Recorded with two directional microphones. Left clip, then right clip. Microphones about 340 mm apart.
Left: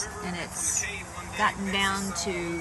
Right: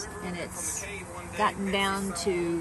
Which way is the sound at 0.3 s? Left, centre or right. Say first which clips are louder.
Left 5 dB; centre.